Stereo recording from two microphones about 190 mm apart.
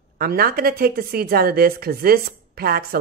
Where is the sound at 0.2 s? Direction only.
50° right (ahead or behind).